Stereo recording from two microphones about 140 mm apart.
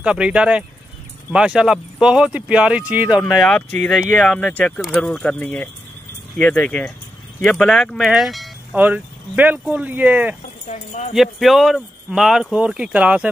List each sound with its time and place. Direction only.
0.0 s speech: 5° right (ahead or behind)
3.3 s speech: 5° left (ahead or behind)
8.7 s speech: 10° right (ahead or behind)
10.7 s speech: 55° left (ahead or behind)
11.1 s speech: centre (ahead or behind)